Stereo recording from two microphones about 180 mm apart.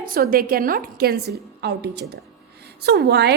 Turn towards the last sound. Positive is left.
turn(degrees=-65)  # may be behind; listen again after turning